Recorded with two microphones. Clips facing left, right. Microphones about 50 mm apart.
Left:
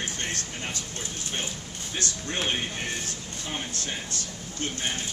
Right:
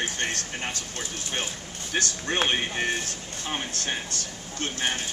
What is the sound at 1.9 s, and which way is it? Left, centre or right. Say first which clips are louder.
Speech: right 5 dB; right.